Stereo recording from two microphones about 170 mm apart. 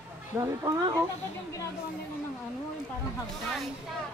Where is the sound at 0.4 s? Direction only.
20° right (ahead or behind).